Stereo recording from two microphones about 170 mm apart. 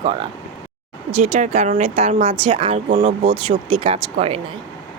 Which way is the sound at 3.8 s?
35° right (ahead or behind).